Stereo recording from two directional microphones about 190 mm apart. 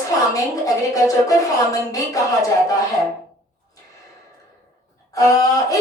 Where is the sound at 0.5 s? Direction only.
20° left (ahead or behind).